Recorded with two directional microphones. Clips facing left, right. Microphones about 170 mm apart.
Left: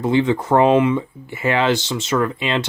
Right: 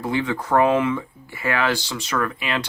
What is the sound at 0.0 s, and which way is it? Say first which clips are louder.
Speech: left 7 dB; 25° left (ahead or behind).